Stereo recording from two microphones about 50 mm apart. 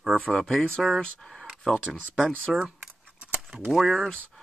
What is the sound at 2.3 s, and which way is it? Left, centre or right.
Speech, right.